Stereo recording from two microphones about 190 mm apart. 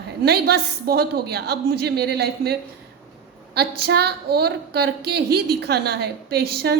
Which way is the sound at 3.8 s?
60° right (ahead or behind).